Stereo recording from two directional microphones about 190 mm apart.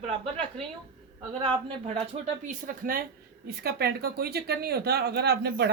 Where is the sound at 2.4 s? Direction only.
45° right (ahead or behind).